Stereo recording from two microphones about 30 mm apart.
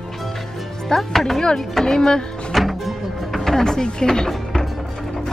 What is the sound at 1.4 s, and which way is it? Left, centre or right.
Speech, left.